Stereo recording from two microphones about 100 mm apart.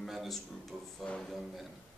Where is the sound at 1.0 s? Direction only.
10° left (ahead or behind).